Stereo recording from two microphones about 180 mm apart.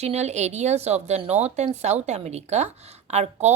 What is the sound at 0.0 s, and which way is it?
A woman's voice, 40° right (ahead or behind).